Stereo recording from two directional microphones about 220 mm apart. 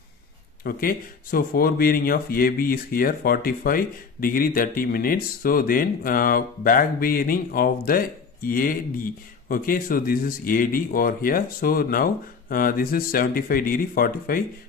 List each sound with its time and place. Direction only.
0.7 s speech: 40° left (ahead or behind)